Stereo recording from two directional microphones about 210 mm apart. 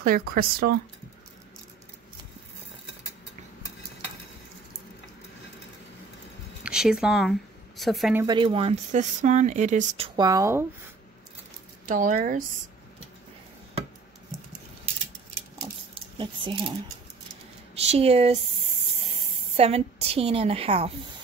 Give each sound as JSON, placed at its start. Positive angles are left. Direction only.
{"t": 0.3, "sound": "speech", "side_deg": -45}
{"t": 6.6, "sound": "speech", "side_deg": -5}
{"t": 8.2, "sound": "speech", "side_deg": -20}
{"t": 11.8, "sound": "speech", "side_deg": -40}
{"t": 15.9, "sound": "squish", "side_deg": -25}
{"t": 17.7, "sound": "speech", "side_deg": -30}
{"t": 19.5, "sound": "a woman's voice", "side_deg": -30}